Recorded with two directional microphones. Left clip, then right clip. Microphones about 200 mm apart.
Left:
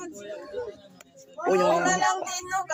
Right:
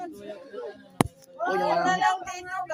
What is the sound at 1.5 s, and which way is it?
Speech, 20° left (ahead or behind).